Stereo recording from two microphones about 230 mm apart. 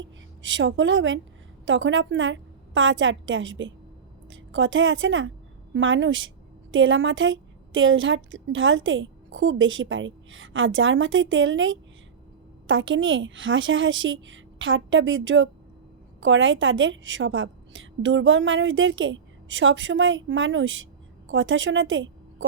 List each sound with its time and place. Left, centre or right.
0.0 s a woman's voice: right